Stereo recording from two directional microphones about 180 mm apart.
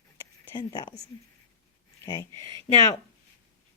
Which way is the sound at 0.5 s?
25° left (ahead or behind).